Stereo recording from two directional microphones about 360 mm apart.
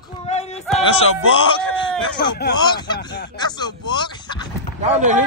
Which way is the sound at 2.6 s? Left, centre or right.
Centre.